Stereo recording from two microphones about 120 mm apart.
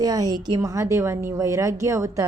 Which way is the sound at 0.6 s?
25° right (ahead or behind).